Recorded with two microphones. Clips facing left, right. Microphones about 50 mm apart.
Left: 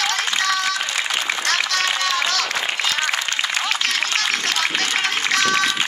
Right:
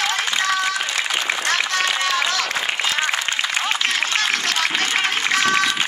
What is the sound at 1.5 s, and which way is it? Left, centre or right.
Applause, centre.